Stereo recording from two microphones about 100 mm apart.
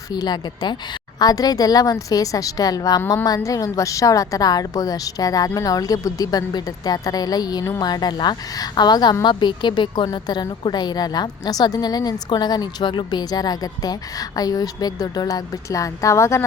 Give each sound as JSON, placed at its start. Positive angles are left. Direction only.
{"t": 0.1, "sound": "a woman's voice", "side_deg": 45}
{"t": 10.1, "sound": "a woman's voice", "side_deg": 40}